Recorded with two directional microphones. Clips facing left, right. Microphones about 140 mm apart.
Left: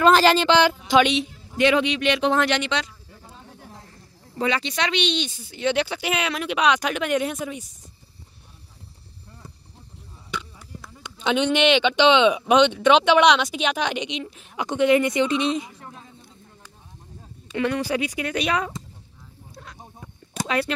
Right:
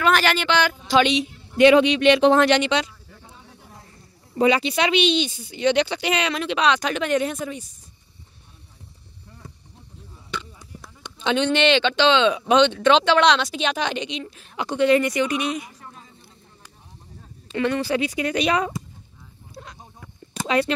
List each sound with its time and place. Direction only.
0.0 s speech: 30° left (ahead or behind)
0.7 s speech: 10° left (ahead or behind)
1.6 s speech: 20° right (ahead or behind)
2.6 s speech: 15° right (ahead or behind)
4.4 s speech: 15° right (ahead or behind); by 7.6 s 5° left (ahead or behind)
10.3 s a sound: 10° left (ahead or behind)
11.1 s speech: 10° left (ahead or behind)
14.0 s speech: 20° left (ahead or behind)
17.6 s speech: 10° left (ahead or behind)
19.5 s a sound: 5° right (ahead or behind)
20.0 s a sound: 25° left (ahead or behind)
20.4 s speech: 5° left (ahead or behind)